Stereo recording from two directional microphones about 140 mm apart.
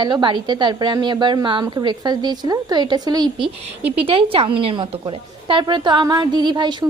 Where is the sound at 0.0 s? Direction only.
35° right (ahead or behind).